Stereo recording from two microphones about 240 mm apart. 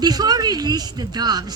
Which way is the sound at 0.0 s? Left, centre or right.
Centre.